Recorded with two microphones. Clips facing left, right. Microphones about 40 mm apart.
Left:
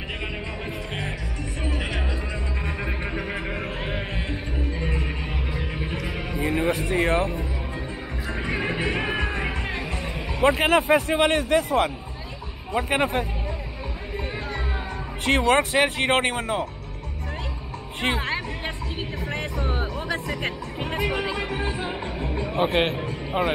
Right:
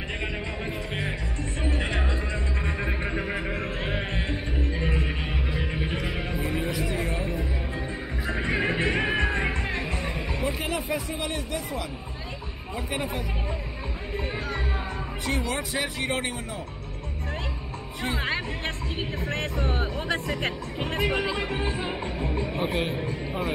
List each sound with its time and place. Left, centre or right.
1.9 s music: centre
2.6 s music: centre
6.4 s music: left
6.7 s a sound: left
8.3 s music: centre
10.4 s speech: left
15.2 s speech: left
19.6 s speech: centre
22.6 s speech: left